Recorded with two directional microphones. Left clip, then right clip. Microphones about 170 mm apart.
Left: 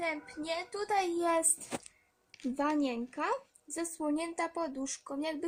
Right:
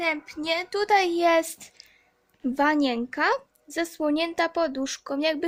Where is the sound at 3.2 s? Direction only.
20° right (ahead or behind).